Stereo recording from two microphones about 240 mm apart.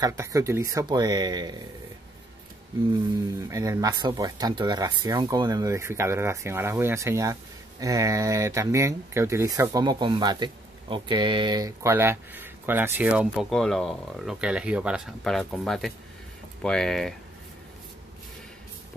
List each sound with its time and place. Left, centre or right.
0.0 s speech: centre
3.3 s speech: centre